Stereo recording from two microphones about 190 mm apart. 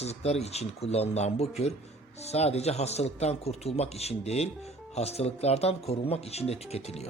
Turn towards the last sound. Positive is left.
turn(degrees=35)  # may be behind; listen again after turning